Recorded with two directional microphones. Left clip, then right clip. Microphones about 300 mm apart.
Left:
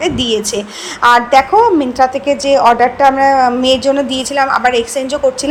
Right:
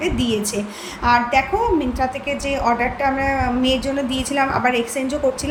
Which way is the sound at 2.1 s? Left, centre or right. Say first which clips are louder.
Left 11 dB; left.